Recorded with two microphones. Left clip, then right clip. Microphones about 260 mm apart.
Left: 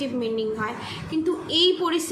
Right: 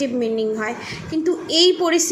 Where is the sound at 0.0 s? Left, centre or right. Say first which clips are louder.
Right 5 dB; centre.